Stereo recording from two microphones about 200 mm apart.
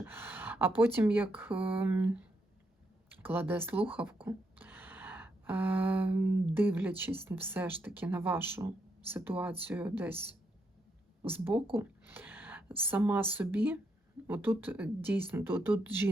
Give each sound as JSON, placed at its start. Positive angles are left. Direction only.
{"t": 0.0, "sound": "speech", "side_deg": -10}
{"t": 3.2, "sound": "a woman's voice", "side_deg": -10}